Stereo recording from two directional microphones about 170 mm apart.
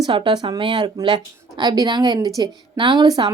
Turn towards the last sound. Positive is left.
turn(degrees=-25)  # may be behind; listen again after turning